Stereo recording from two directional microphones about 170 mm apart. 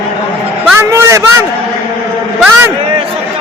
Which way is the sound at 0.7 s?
15° right (ahead or behind).